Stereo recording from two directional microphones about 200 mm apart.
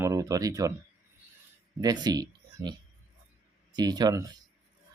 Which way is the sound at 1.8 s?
20° right (ahead or behind).